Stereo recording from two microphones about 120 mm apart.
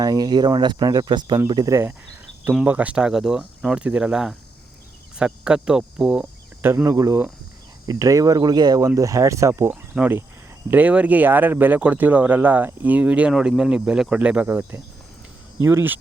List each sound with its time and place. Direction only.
0.0 s speech: 35° right (ahead or behind)
1.7 s speech: 20° right (ahead or behind)